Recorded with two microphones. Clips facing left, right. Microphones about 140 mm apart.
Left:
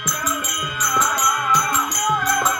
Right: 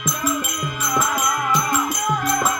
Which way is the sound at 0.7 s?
25° right (ahead or behind).